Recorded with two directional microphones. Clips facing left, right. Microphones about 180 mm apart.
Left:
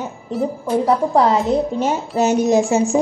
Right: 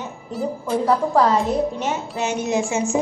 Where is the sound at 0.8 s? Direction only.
20° left (ahead or behind).